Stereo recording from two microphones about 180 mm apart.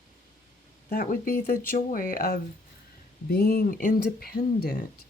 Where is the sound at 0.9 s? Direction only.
55° left (ahead or behind).